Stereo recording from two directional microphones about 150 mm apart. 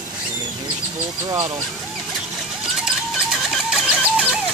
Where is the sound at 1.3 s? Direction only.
25° right (ahead or behind).